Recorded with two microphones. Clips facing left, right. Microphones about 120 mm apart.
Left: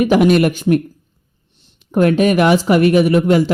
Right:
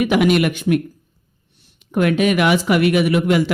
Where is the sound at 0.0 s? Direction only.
35° left (ahead or behind).